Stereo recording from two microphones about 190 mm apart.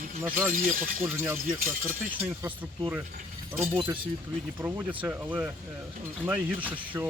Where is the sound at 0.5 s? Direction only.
45° right (ahead or behind).